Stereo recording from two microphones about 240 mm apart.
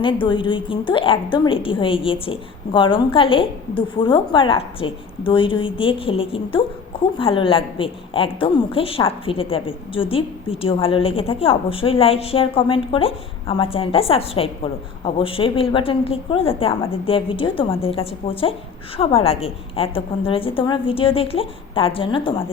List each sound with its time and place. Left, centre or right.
0.0 s a woman's voice: left